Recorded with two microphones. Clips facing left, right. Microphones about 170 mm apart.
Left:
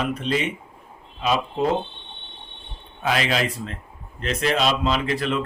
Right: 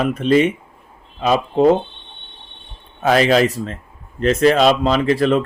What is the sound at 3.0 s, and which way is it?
Speech, 40° right (ahead or behind).